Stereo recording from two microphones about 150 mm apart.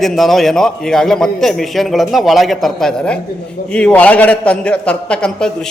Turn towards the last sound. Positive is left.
turn(degrees=5)  # may be behind; listen again after turning